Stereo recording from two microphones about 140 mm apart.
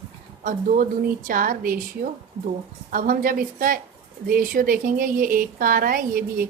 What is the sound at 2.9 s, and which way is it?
Speech, 80° right.